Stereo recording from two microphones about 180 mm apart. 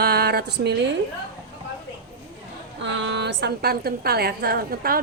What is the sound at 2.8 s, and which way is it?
A woman's voice, 85° right.